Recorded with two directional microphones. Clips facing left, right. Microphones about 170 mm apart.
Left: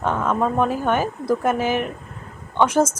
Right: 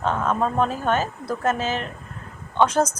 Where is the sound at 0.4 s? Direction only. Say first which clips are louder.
Left 3 dB; 15° left (ahead or behind).